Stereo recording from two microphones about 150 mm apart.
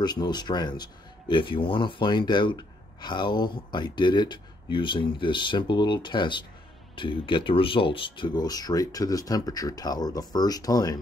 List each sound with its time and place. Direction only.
0.0 s speech: 30° left (ahead or behind)